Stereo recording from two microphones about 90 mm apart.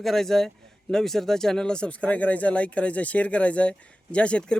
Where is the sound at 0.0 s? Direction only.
5° left (ahead or behind).